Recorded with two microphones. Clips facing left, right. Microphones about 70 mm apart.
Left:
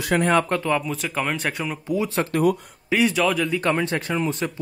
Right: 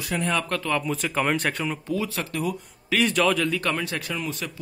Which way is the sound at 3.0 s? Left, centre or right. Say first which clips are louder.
Left 1 dB; centre.